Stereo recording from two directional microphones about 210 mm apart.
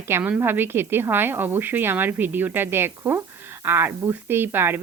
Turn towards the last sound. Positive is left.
turn(degrees=-10)  # may be behind; listen again after turning